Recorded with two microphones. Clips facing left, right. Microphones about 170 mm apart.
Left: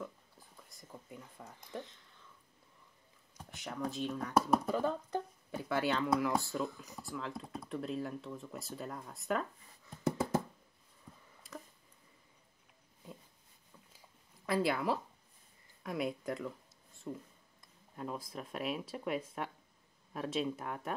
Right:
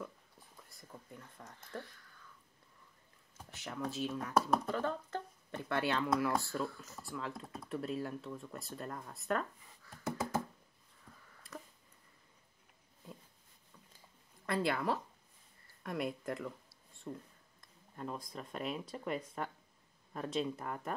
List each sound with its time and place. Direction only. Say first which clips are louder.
0.0 s whispering: left 1 dB; centre (ahead or behind)
0.9 s speech: left 2 dB; 10° left (ahead or behind)
3.3 s speech: left 1 dB; centre (ahead or behind)
5.6 s speech: left 1 dB; centre (ahead or behind)
6.7 s speech: left 1 dB; 15° left (ahead or behind)
7.0 s speech: left 1 dB; centre (ahead or behind)
11.1 s a sound: left 2 dB; 15° left (ahead or behind)
14.4 s speech: left 2 dB; centre (ahead or behind)